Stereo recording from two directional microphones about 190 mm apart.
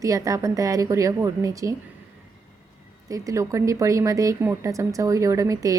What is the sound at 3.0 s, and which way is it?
A woman's voice, 15° right (ahead or behind).